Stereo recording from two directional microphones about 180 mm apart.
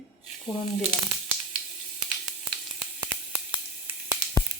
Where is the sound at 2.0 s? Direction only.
Centre (ahead or behind).